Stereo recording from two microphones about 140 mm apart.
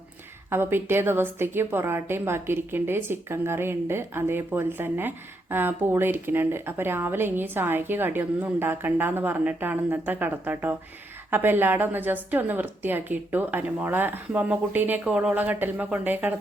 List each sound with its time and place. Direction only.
0.5 s a woman's voice: 15° right (ahead or behind)